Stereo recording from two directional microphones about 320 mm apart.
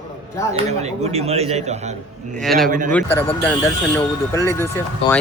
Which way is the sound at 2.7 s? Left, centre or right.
Right.